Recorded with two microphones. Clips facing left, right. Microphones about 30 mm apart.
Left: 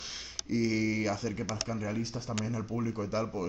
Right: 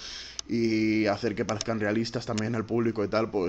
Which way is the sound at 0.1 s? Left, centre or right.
Right.